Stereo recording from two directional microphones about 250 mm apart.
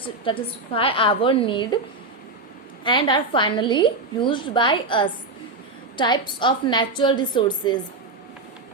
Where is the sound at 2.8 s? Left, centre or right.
Centre.